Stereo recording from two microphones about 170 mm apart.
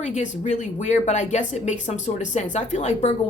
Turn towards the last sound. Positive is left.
turn(degrees=40)  # may be behind; listen again after turning